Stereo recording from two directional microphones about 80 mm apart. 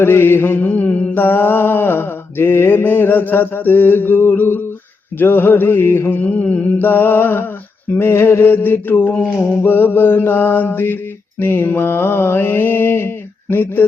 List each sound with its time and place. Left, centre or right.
0.0 s mantra: left